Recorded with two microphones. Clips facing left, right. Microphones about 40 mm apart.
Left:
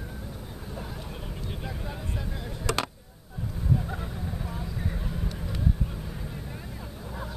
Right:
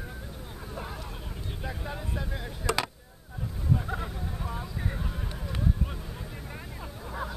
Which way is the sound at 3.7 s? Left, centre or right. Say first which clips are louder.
Even; centre.